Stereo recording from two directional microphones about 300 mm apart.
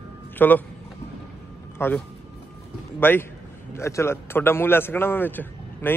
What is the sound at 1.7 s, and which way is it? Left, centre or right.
A man's voice, centre.